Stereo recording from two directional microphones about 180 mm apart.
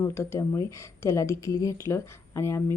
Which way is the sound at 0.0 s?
15° left (ahead or behind).